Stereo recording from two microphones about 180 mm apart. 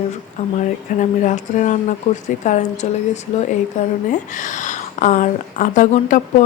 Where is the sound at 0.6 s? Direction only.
45° left (ahead or behind).